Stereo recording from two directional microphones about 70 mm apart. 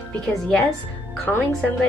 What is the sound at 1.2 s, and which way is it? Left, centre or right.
Speech, left.